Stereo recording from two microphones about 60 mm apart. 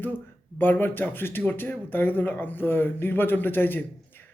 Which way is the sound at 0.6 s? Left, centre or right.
Left.